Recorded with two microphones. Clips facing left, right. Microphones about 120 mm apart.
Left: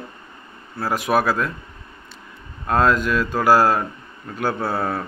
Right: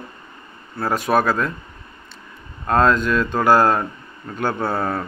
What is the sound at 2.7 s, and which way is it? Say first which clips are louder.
Speech: right 1 dB; 5° left (ahead or behind).